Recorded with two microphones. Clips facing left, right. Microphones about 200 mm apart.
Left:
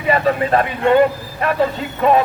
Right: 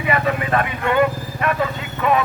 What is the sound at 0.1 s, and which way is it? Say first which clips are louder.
Speech: left 5 dB; 35° left (ahead or behind).